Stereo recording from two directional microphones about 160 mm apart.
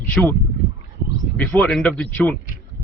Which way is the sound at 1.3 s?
10° left (ahead or behind).